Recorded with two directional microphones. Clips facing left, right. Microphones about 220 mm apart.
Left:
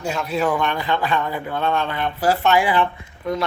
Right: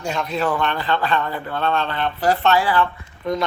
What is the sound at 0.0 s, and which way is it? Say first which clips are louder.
Speech: left 1 dB; 5° left (ahead or behind).